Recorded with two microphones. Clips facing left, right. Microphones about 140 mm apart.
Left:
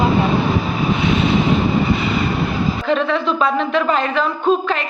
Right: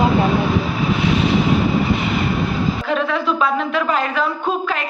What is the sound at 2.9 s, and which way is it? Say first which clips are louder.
A woman's voice: left 3 dB; 5° right (ahead or behind).